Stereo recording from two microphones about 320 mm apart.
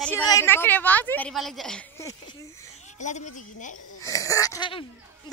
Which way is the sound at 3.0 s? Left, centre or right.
Left.